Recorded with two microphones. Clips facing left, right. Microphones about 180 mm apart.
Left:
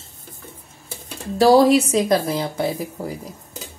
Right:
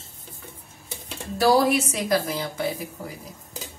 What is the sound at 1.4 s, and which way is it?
Speech, 30° left (ahead or behind).